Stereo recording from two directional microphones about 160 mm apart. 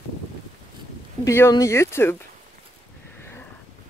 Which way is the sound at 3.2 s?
15° left (ahead or behind).